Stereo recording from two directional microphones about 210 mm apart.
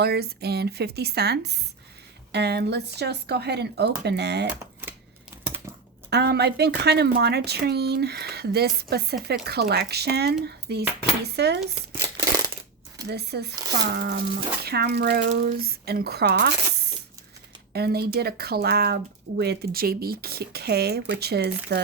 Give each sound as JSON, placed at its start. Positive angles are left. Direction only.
{"t": 0.0, "sound": "speech", "side_deg": -50}
{"t": 4.4, "sound": "typewriter", "side_deg": -10}
{"t": 6.1, "sound": "speech", "side_deg": -50}
{"t": 11.9, "sound": "tearing", "side_deg": -15}
{"t": 13.1, "sound": "speech", "side_deg": -50}
{"t": 17.7, "sound": "speech", "side_deg": -50}